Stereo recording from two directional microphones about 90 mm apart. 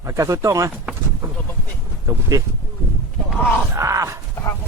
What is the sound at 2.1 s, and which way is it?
Speech, 35° right (ahead or behind).